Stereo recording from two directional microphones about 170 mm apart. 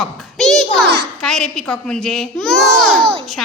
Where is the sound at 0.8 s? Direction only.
70° right (ahead or behind).